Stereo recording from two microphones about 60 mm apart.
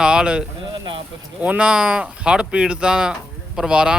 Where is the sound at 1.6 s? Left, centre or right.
Centre.